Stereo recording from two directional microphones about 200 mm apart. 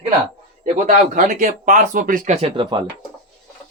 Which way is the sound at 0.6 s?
40° right (ahead or behind).